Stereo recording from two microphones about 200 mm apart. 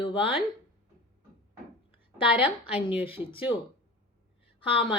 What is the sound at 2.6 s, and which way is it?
Speech, 5° right (ahead or behind).